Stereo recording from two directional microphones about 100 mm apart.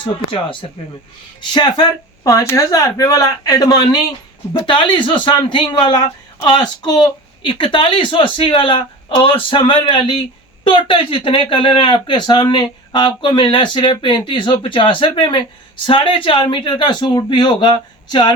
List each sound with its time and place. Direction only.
1.5 s speech: 45° left (ahead or behind)
4.6 s speech: 55° left (ahead or behind)